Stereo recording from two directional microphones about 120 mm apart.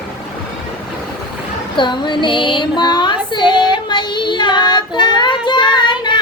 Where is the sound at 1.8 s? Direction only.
40° left (ahead or behind).